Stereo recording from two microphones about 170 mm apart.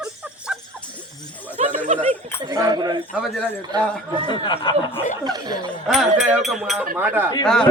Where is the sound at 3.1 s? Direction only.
Centre (ahead or behind).